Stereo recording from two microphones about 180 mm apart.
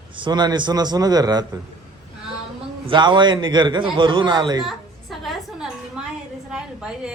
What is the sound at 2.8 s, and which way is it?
A man's voice, 25° right (ahead or behind).